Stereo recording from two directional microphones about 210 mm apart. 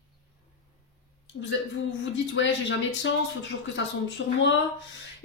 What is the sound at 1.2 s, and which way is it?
A man's voice, 60° left (ahead or behind).